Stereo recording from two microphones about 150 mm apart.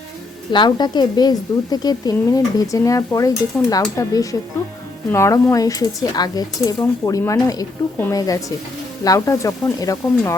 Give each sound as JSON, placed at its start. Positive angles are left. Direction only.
{"t": 0.5, "sound": "speech", "side_deg": 30}